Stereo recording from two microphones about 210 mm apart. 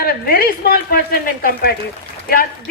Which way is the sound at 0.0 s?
45° left (ahead or behind).